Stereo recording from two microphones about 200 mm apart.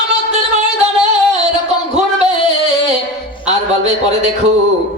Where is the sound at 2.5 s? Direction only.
35° right (ahead or behind).